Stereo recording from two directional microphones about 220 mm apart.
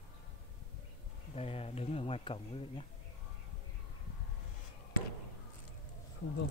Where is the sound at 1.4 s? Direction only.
25° left (ahead or behind).